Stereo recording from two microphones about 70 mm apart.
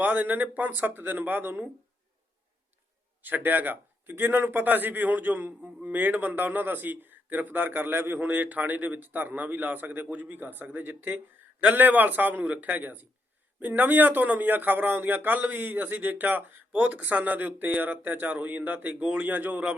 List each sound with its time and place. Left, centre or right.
0.0 s a man's voice: right
3.2 s a man's voice: right